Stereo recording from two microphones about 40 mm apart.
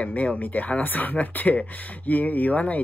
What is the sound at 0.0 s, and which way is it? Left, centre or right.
A woman's voice, left.